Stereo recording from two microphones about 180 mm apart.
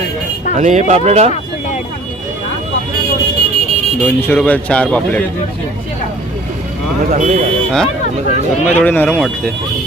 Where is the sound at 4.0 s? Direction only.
10° left (ahead or behind).